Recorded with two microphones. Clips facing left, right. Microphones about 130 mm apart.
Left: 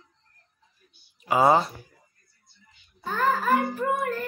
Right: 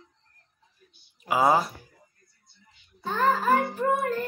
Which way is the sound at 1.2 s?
5° right (ahead or behind).